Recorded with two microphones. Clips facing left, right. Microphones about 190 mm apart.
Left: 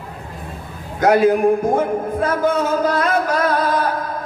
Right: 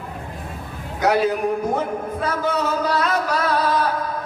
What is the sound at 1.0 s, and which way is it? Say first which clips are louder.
A man's voice: left 6 dB; 50° left (ahead or behind).